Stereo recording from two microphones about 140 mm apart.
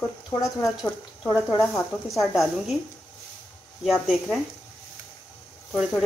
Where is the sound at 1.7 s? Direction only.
Centre (ahead or behind).